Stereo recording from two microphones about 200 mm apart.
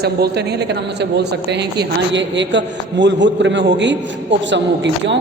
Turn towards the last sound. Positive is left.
turn(degrees=-65)  # may be behind; listen again after turning